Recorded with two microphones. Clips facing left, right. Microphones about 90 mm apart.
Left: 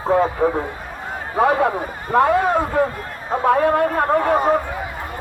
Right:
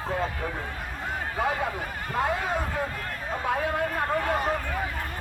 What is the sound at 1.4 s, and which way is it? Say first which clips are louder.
A man's voice: left 13 dB; 65° left (ahead or behind).